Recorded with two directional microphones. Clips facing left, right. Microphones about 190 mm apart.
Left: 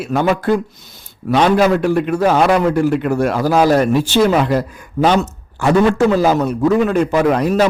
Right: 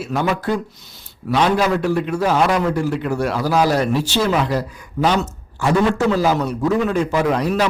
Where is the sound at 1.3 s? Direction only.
55° left (ahead or behind).